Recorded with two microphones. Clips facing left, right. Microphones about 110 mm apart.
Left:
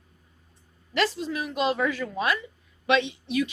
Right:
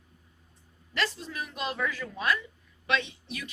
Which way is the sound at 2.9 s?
90° left.